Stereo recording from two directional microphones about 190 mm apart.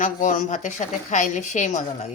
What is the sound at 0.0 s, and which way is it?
A woman's voice, 45° left (ahead or behind).